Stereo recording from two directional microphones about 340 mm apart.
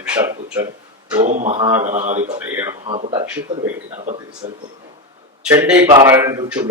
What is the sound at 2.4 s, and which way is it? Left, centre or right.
Speech, centre.